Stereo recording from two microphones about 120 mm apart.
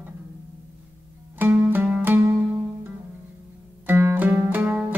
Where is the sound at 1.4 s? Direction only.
15° right (ahead or behind).